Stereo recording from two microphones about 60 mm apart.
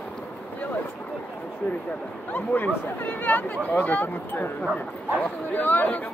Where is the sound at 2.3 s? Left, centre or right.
Left.